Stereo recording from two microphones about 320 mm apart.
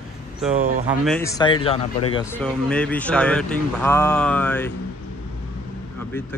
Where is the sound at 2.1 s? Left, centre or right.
Centre.